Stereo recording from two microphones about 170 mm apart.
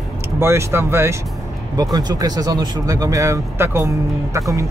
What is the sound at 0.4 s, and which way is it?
Speech, 15° right (ahead or behind).